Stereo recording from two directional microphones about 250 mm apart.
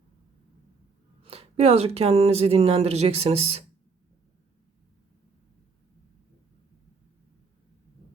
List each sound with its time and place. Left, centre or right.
1.2 s speech: right